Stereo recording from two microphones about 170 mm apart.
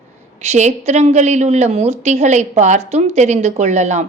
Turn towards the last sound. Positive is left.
turn(degrees=-45)  # may be behind; listen again after turning